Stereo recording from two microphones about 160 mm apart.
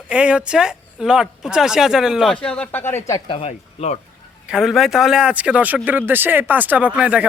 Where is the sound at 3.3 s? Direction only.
40° left (ahead or behind).